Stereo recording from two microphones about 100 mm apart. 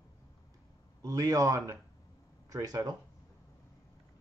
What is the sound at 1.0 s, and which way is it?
Speech, 35° right (ahead or behind).